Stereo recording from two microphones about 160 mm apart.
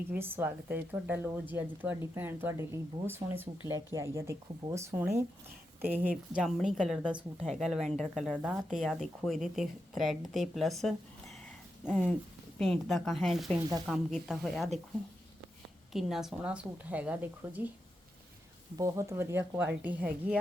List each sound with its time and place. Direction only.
0.1 s speech: 15° right (ahead or behind)
6.3 s a woman's voice: centre (ahead or behind)
15.9 s speech: centre (ahead or behind)
18.8 s speech: 15° right (ahead or behind)